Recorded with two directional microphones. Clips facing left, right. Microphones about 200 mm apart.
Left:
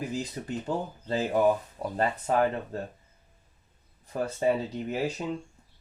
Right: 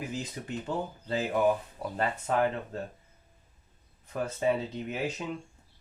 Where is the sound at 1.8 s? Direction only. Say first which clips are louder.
Left 3 dB; 35° left (ahead or behind).